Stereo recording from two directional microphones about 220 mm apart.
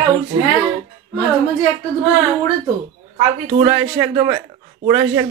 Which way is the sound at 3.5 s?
25° right (ahead or behind).